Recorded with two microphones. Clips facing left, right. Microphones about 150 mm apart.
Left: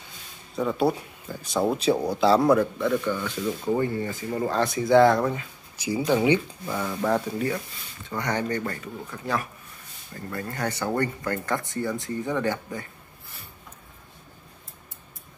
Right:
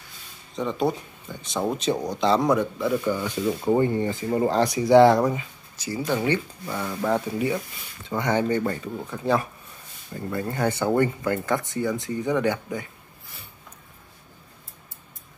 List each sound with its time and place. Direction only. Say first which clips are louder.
0.6 s speech: left 1 dB; 5° left (ahead or behind)
3.0 s rub: right 2 dB; 15° right (ahead or behind)
5.8 s speech: left 3 dB; 15° left (ahead or behind)
6.6 s speech: even; centre (ahead or behind)
9.2 s rub: right 6 dB; 25° right (ahead or behind)
10.1 s speech: right 5 dB; 15° right (ahead or behind)